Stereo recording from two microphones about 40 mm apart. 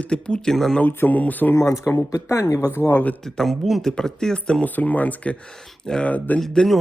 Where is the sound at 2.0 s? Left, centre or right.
Left.